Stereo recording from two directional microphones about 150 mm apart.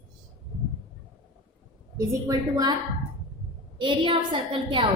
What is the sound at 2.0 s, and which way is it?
Speech, 25° right (ahead or behind).